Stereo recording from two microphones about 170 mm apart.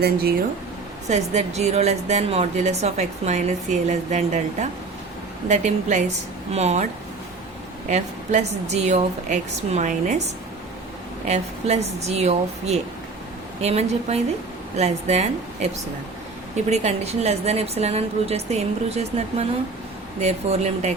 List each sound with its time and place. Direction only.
0.0 s speech: 65° right (ahead or behind)
1.0 s a woman's voice: 40° right (ahead or behind)
7.9 s a woman's voice: 45° right (ahead or behind)
11.3 s a woman's voice: 40° right (ahead or behind)